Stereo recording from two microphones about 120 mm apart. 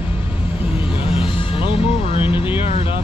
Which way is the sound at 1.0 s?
50° left (ahead or behind).